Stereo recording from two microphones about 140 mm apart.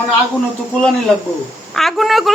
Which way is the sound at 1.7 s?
Centre (ahead or behind).